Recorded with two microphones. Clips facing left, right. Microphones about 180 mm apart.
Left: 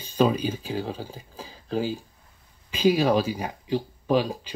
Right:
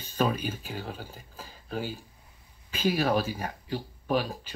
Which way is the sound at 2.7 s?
15° left (ahead or behind).